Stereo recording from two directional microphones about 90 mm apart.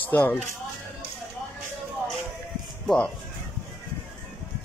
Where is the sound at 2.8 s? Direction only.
5° left (ahead or behind).